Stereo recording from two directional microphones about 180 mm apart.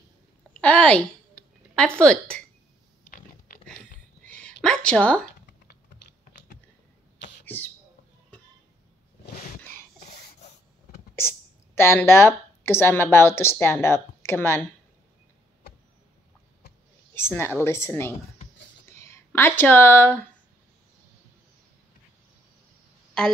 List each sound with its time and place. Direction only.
0.5 s a woman's voice: 5° left (ahead or behind)
4.2 s hiccup: 5° left (ahead or behind)
4.6 s a woman's voice: 5° left (ahead or behind)
7.4 s speech: 10° left (ahead or behind)
9.2 s sneeze: 60° left (ahead or behind)
11.1 s speech: 15° left (ahead or behind)
17.1 s a woman's voice: 15° left (ahead or behind)